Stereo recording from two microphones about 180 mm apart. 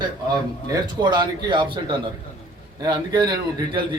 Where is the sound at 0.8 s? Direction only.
25° right (ahead or behind).